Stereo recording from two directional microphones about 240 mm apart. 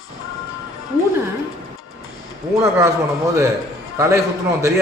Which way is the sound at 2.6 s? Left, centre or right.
Centre.